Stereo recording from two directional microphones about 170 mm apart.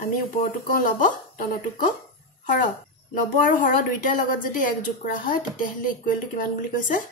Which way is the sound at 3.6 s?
50° left (ahead or behind).